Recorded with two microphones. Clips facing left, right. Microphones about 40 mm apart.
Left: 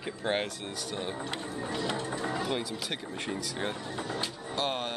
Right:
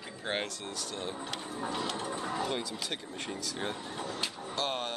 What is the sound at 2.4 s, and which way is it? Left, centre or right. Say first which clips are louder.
Speech: left 2 dB; centre.